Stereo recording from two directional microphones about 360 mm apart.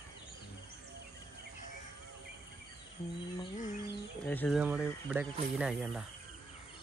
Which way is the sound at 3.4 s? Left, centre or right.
Left.